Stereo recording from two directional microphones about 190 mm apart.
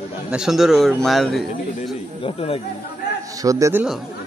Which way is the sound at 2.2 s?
30° left (ahead or behind).